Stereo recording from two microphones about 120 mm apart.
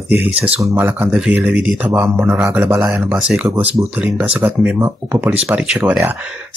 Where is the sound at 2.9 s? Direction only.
5° right (ahead or behind).